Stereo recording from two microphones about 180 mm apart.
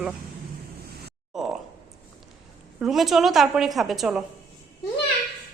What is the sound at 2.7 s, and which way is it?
A woman's voice, centre (ahead or behind).